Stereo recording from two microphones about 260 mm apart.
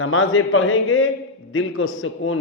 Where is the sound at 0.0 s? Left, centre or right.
Left.